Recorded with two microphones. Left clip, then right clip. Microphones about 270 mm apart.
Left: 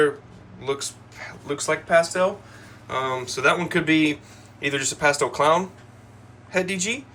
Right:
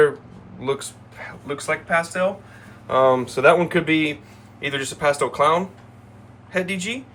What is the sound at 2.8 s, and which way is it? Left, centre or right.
Speech, centre.